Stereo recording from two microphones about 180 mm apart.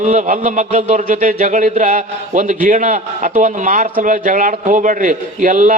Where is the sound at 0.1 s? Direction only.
45° right (ahead or behind).